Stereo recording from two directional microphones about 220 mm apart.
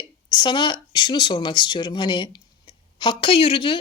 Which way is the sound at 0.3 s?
20° left (ahead or behind).